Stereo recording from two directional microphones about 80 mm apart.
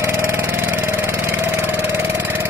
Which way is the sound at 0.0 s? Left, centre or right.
Right.